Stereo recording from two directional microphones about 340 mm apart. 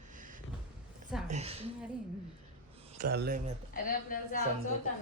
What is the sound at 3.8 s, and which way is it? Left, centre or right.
Speech, left.